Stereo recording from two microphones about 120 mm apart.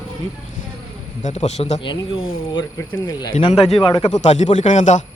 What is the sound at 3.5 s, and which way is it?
Speech, 60° left (ahead or behind).